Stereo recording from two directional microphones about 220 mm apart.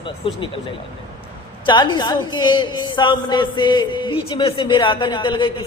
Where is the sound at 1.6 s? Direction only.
20° left (ahead or behind).